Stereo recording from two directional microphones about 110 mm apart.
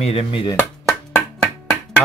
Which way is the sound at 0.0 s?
65° left (ahead or behind).